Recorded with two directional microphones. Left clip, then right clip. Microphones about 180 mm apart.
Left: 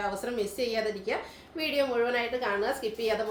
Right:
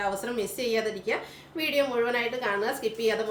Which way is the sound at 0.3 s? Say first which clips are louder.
Right 2 dB; 15° right (ahead or behind).